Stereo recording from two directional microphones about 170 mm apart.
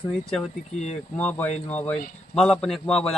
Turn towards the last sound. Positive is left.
turn(degrees=5)  # may be behind; listen again after turning